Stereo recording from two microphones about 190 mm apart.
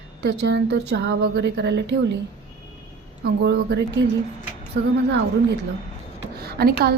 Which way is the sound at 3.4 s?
65° right (ahead or behind).